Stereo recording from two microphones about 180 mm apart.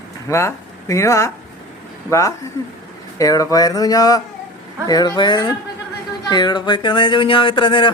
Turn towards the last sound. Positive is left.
turn(degrees=25)  # may be behind; listen again after turning